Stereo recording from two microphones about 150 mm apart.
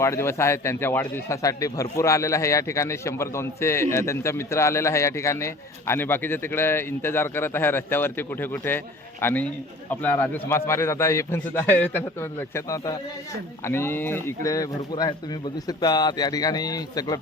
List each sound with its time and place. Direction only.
0.0 s speech: 20° left (ahead or behind)